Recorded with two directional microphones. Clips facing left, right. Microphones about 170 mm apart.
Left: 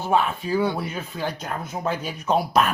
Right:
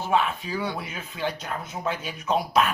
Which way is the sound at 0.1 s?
30° left (ahead or behind).